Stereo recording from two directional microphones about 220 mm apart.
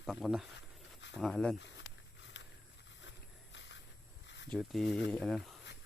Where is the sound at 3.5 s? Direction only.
55° left (ahead or behind).